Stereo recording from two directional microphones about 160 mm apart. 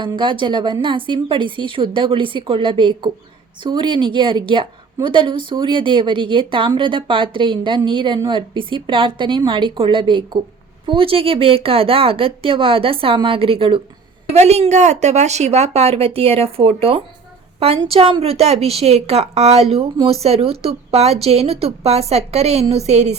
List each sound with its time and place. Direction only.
0.0 s a woman's voice: 30° right (ahead or behind)